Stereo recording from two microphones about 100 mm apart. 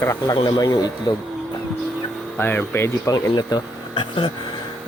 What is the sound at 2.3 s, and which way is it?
Speech, 20° left (ahead or behind).